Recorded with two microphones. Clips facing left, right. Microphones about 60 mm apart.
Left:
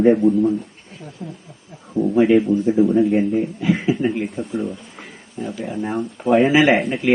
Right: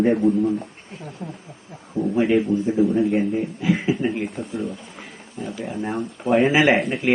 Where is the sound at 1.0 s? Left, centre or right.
Centre.